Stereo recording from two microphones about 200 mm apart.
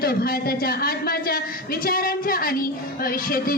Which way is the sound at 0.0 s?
50° left (ahead or behind).